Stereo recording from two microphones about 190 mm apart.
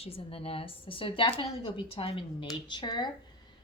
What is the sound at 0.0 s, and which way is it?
A woman's voice, 30° left (ahead or behind).